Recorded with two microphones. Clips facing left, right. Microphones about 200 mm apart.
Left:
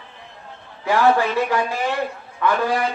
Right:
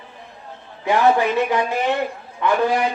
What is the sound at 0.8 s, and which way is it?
Speech, 20° right (ahead or behind).